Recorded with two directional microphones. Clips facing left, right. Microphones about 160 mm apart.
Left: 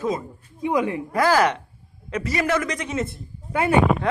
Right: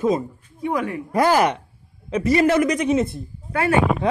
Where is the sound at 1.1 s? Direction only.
25° right (ahead or behind).